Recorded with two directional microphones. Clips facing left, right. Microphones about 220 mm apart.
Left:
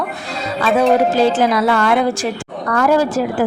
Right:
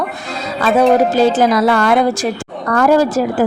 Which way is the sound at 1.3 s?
40° right (ahead or behind).